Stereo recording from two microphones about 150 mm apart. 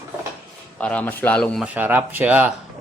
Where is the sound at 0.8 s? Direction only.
10° left (ahead or behind).